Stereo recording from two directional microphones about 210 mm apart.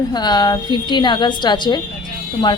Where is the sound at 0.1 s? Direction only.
20° left (ahead or behind).